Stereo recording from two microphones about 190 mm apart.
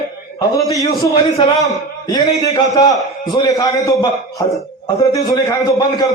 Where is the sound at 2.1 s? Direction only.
20° left (ahead or behind).